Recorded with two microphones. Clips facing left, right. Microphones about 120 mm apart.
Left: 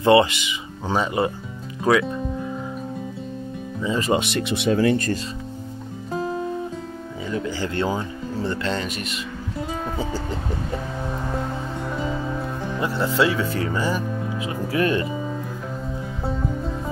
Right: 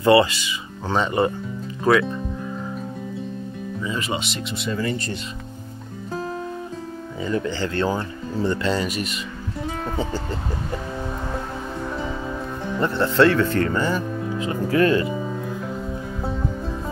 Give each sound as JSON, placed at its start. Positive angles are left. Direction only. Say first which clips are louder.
{"t": 0.0, "sound": "speech", "louder": "even", "side_deg": 20}
{"t": 0.9, "sound": "speech", "louder": "right 2 dB", "side_deg": 5}
{"t": 4.1, "sound": "speech", "louder": "left 6 dB", "side_deg": 55}
{"t": 7.2, "sound": "speech", "louder": "right 2 dB", "side_deg": 5}
{"t": 8.5, "sound": "speech", "louder": "right 4 dB", "side_deg": -5}
{"t": 12.6, "sound": "speech", "louder": "right 3 dB", "side_deg": 5}